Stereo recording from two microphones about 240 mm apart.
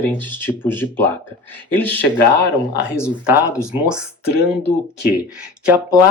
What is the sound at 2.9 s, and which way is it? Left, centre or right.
Speech, centre.